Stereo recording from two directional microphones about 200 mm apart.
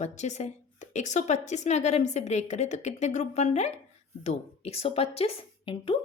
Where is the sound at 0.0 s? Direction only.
35° left (ahead or behind).